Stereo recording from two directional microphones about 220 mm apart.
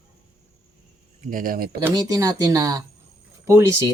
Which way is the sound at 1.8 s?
15° right (ahead or behind).